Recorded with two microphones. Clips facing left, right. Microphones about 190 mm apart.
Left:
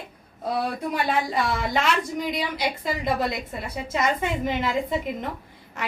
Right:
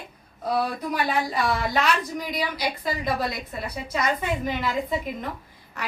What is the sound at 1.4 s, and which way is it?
A woman's voice, 25° left (ahead or behind).